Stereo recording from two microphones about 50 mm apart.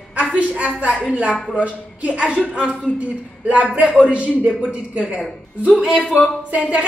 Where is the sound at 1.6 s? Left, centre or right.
Right.